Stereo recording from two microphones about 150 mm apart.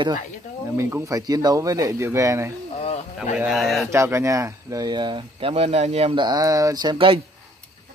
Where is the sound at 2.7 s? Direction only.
40° left (ahead or behind).